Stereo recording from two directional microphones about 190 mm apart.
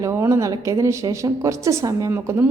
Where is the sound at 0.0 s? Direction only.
15° right (ahead or behind).